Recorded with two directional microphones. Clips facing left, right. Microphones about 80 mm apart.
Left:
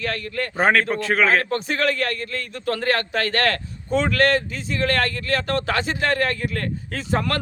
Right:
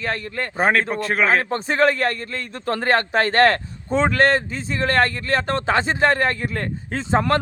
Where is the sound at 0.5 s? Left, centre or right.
Centre.